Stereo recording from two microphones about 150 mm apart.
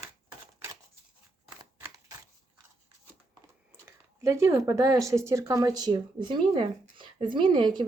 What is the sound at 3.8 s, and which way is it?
Speech, 20° right (ahead or behind).